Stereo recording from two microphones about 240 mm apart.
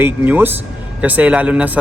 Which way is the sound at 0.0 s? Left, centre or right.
Centre.